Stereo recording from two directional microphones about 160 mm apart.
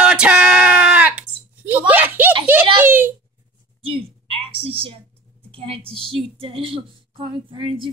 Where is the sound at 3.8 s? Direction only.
35° right (ahead or behind).